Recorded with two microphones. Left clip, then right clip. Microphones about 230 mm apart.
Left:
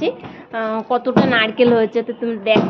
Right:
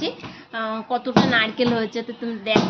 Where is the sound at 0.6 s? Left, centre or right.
Centre.